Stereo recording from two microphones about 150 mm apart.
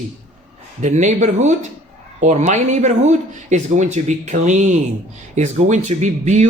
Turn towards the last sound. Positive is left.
turn(degrees=-50)  # may be behind; listen again after turning